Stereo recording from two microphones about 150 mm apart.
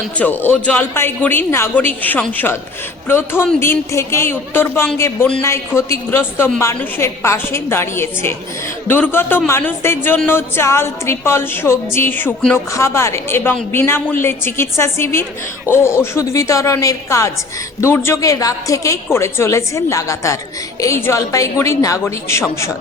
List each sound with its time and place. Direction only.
0.2 s a woman's voice: 10° left (ahead or behind)